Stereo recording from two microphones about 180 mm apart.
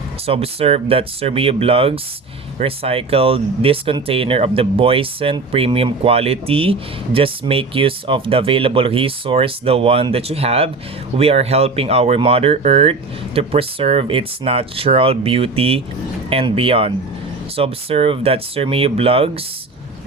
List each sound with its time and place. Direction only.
0.3 s speech: 35° right (ahead or behind)